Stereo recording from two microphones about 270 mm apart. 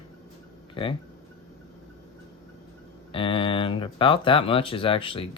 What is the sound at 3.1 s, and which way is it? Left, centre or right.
Speech, centre.